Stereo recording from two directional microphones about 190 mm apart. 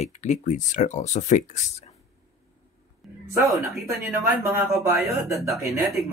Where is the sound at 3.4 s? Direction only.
Centre (ahead or behind).